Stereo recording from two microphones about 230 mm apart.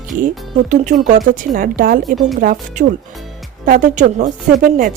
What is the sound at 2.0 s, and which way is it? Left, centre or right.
Speech, centre.